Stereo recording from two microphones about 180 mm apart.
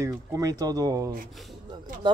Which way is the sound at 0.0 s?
20° right (ahead or behind).